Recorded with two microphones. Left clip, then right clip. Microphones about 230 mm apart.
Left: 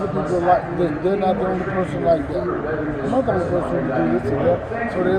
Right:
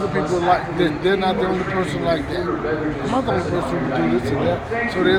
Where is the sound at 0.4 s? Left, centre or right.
Right.